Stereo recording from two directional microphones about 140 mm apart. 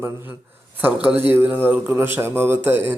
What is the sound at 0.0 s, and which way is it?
Mantra, 15° right (ahead or behind).